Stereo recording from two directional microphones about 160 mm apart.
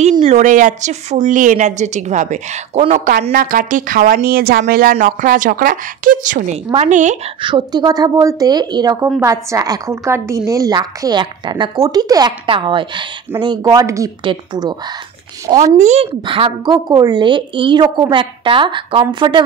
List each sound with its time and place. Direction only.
0.2 s a woman's voice: 45° right (ahead or behind)
3.3 s a woman's voice: 60° right (ahead or behind)
7.4 s a woman's voice: 30° right (ahead or behind)
15.8 s a woman's voice: 45° right (ahead or behind)
16.3 s a woman's voice: 30° right (ahead or behind)